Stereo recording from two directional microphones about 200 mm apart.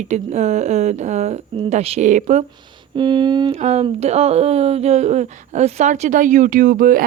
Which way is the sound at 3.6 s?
35° right (ahead or behind).